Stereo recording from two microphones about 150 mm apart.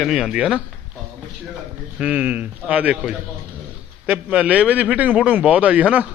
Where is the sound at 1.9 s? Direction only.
10° right (ahead or behind).